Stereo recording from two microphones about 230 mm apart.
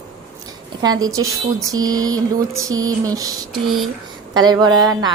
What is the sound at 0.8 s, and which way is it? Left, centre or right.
A woman's voice, centre.